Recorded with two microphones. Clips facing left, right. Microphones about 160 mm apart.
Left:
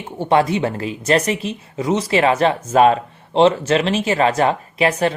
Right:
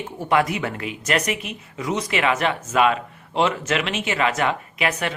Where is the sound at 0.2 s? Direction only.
30° left (ahead or behind).